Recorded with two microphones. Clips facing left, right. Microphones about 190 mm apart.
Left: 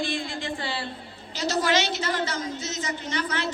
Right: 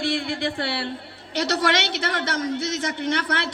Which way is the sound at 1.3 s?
70° right (ahead or behind).